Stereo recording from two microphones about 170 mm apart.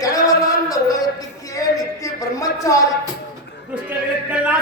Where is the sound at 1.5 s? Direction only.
20° left (ahead or behind).